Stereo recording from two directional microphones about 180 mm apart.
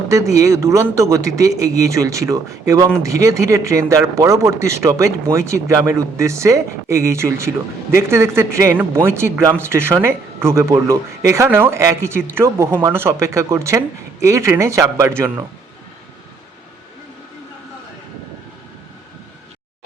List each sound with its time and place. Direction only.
0.1 s speech: 15° right (ahead or behind)